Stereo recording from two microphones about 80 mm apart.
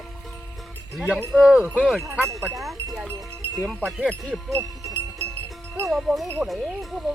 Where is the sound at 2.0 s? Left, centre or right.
Right.